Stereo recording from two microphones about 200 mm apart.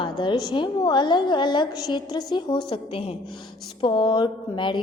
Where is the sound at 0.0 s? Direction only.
20° left (ahead or behind).